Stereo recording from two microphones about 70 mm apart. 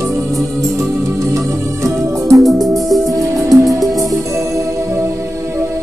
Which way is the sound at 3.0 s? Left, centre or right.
Right.